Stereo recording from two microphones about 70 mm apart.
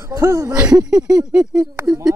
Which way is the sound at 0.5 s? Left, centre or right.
Centre.